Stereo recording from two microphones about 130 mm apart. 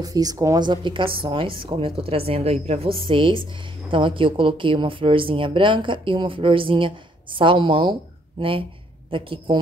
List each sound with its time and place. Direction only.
0.0 s a woman's voice: 30° right (ahead or behind)